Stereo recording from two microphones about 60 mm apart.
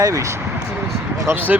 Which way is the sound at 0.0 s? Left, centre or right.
Right.